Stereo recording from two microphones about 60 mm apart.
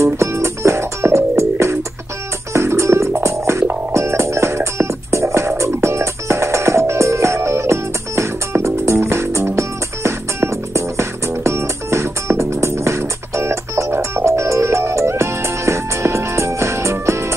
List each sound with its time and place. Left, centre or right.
0.0 s music: right